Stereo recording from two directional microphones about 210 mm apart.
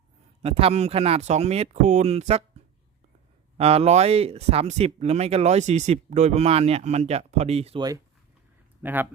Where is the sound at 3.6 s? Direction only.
30° right (ahead or behind).